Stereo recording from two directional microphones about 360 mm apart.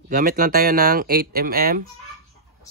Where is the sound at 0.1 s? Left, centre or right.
Right.